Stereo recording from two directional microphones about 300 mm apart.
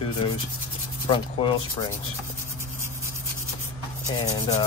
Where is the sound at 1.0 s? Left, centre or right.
Centre.